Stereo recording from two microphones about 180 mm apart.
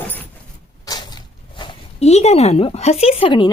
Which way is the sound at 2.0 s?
35° left (ahead or behind).